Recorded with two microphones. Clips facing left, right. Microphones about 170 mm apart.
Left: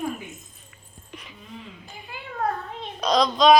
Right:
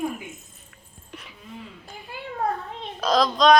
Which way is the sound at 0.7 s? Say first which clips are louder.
Even; centre (ahead or behind).